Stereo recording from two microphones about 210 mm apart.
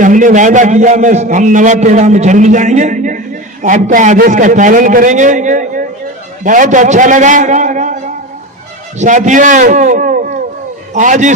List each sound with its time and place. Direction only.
0.0 s a man's voice: 40° right (ahead or behind)